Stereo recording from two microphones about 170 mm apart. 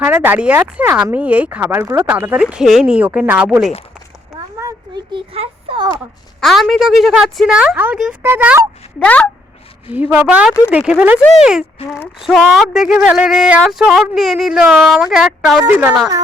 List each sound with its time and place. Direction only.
0.0 s speech: 10° right (ahead or behind)
4.5 s a child's voice: 20° right (ahead or behind)
6.4 s speech: centre (ahead or behind)
9.0 s speech: 10° left (ahead or behind)
9.9 s speech: 10° right (ahead or behind)
12.2 s speech: centre (ahead or behind)
16.0 s a woman's voice: 20° right (ahead or behind)